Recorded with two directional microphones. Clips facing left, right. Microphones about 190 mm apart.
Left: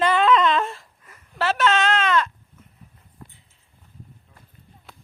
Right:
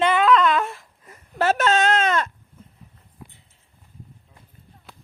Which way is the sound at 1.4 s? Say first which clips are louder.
Right 2 dB; 45° right (ahead or behind).